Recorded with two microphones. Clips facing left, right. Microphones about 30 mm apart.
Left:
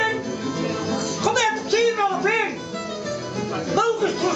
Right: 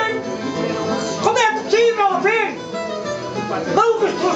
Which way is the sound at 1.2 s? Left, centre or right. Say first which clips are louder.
Right 5 dB; centre.